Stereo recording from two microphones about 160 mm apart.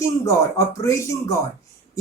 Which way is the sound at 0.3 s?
20° left (ahead or behind).